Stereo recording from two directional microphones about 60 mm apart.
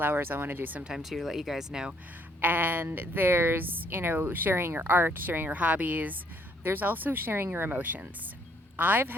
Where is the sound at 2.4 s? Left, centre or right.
Right.